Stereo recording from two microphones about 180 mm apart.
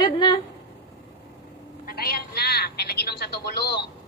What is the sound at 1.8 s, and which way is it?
A woman's voice, 55° left (ahead or behind).